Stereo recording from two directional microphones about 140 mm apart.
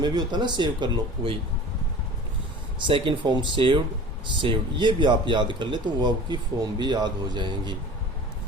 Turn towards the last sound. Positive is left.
turn(degrees=-35)  # may be behind; listen again after turning